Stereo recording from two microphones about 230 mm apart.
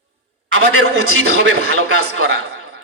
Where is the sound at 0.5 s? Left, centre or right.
Right.